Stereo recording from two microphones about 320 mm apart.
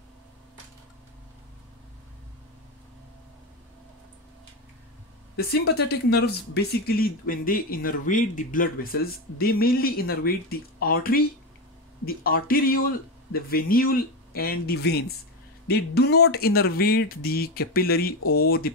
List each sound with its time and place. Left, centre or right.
5.5 s speech: left